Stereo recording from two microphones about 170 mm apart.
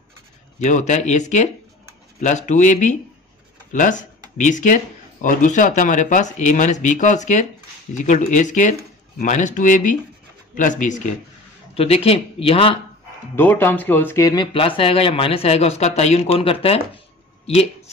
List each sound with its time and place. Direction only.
0.6 s speech: 45° left (ahead or behind)
11.7 s speech: 35° left (ahead or behind)
13.4 s speech: 10° left (ahead or behind); by 17.0 s 35° left (ahead or behind)